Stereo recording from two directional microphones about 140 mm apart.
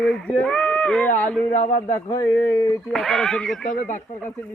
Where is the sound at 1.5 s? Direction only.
65° left (ahead or behind).